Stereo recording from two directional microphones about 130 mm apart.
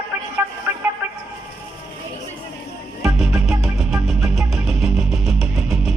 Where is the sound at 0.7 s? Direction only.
15° right (ahead or behind).